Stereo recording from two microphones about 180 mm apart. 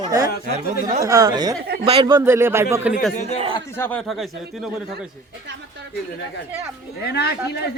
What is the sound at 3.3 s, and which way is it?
Speech, 30° right (ahead or behind).